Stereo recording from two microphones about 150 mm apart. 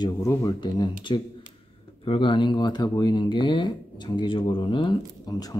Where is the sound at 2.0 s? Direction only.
35° left (ahead or behind).